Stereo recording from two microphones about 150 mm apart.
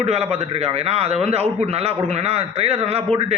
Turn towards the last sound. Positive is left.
turn(degrees=-45)  # may be behind; listen again after turning